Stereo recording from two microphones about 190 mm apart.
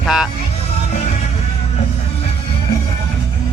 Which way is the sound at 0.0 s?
Centre (ahead or behind).